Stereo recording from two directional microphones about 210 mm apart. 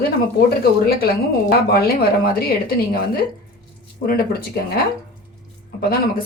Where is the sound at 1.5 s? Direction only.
45° left (ahead or behind).